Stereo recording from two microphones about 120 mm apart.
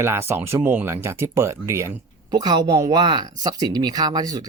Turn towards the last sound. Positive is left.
turn(degrees=-30)  # may be behind; listen again after turning